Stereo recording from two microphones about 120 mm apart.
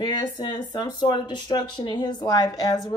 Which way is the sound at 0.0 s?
35° left (ahead or behind).